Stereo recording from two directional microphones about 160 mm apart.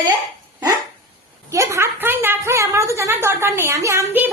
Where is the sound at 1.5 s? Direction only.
20° right (ahead or behind).